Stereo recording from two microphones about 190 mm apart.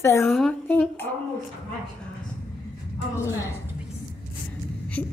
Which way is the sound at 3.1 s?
15° left (ahead or behind).